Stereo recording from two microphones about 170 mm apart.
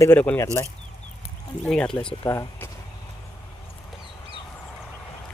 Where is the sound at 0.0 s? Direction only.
10° left (ahead or behind).